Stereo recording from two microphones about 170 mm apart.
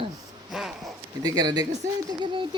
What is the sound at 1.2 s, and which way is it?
Speech, 25° right (ahead or behind).